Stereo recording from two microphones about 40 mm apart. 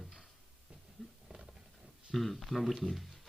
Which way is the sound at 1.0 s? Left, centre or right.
Centre.